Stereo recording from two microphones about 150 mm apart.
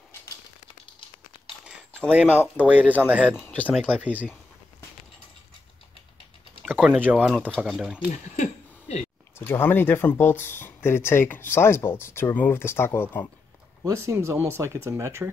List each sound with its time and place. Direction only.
2.0 s speech: 10° right (ahead or behind)
3.3 s speech: 15° left (ahead or behind)
4.0 s speech: 10° right (ahead or behind)
6.6 s speech: 5° right (ahead or behind)
8.4 s a sound: 45° left (ahead or behind)
9.4 s speech: 15° left (ahead or behind)
13.8 s speech: 20° right (ahead or behind)